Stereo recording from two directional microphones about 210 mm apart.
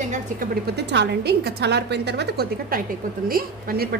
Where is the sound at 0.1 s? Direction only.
45° right (ahead or behind).